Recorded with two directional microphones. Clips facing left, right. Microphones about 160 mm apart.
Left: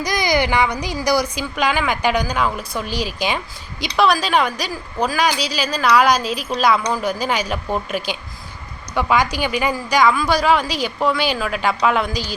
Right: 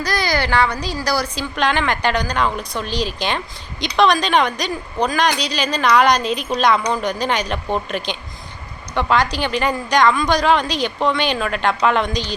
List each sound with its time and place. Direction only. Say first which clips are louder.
0.0 s a woman's voice: left 2 dB; 15° left (ahead or behind)